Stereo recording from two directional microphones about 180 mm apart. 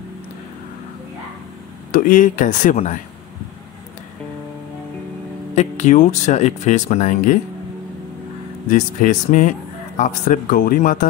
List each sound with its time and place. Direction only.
1.9 s speech: 50° left (ahead or behind)
5.6 s speech: 40° left (ahead or behind)
8.6 s speech: 45° left (ahead or behind)